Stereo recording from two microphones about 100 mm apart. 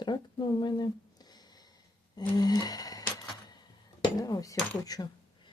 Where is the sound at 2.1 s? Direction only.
40° left (ahead or behind).